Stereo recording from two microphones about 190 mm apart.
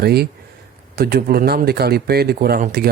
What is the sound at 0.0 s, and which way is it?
Speech, 55° right (ahead or behind).